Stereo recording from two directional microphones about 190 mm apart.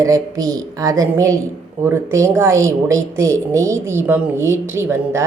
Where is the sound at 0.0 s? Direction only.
15° right (ahead or behind).